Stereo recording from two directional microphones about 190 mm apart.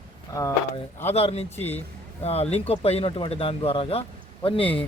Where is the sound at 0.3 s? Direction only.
20° left (ahead or behind).